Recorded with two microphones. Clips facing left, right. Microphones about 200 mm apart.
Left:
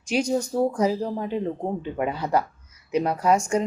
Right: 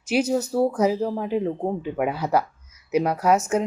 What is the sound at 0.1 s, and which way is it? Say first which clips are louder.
A woman's voice: right 2 dB; 5° right (ahead or behind).